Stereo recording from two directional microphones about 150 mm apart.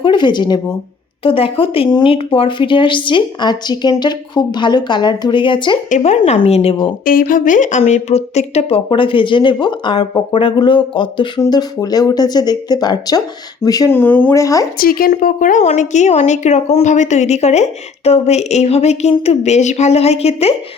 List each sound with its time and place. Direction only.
0.0 s speech: 30° left (ahead or behind)
5.9 s a woman's voice: 50° left (ahead or behind)
7.0 s speech: 70° left (ahead or behind); by 13.9 s 25° left (ahead or behind)
13.9 s speech: 10° left (ahead or behind)
14.8 s a woman's voice: 80° left; by 20.6 s 40° left (ahead or behind)